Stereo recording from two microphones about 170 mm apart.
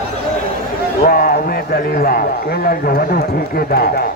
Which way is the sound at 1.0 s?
55° left (ahead or behind).